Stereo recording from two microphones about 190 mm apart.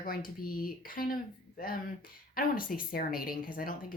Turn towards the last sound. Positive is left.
turn(degrees=50)  # may be behind; listen again after turning